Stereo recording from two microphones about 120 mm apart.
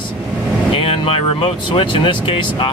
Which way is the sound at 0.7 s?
50° left (ahead or behind).